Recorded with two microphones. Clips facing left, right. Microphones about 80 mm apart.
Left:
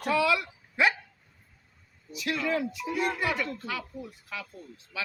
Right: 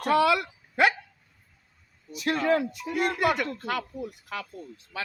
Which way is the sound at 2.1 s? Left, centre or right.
Right.